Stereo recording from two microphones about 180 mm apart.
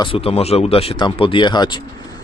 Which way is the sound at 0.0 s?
30° left (ahead or behind).